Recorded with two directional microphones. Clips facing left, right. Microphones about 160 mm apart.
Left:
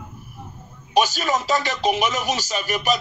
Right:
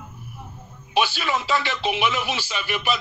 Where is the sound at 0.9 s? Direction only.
40° left (ahead or behind).